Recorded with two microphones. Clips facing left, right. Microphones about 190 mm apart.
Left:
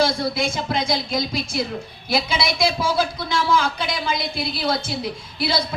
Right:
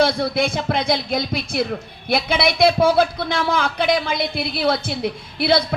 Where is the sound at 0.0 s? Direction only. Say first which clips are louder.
Right 3 dB; 60° right (ahead or behind).